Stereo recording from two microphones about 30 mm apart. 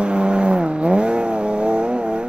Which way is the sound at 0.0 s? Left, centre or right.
Right.